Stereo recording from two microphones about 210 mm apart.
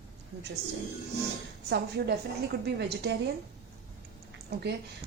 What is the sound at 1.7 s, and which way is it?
A woman's voice, 50° right (ahead or behind).